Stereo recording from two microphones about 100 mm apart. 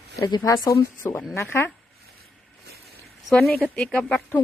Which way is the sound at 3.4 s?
Centre (ahead or behind).